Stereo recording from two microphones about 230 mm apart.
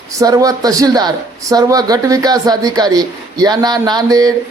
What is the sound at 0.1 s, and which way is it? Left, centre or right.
Speech, centre.